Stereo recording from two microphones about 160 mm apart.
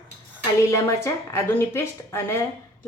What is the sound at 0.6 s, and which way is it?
A woman's voice, 15° left (ahead or behind).